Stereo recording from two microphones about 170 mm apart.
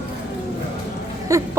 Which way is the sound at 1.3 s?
15° right (ahead or behind).